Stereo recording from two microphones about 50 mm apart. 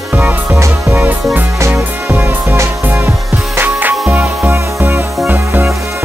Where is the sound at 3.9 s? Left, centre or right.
Centre.